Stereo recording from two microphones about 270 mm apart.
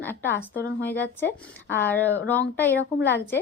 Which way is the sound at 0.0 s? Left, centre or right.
Centre.